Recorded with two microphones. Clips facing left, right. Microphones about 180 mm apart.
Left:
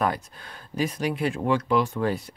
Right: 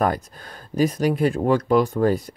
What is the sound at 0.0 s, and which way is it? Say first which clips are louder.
Speech: right 4 dB; 45° right (ahead or behind).